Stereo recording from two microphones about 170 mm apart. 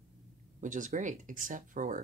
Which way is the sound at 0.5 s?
50° right (ahead or behind).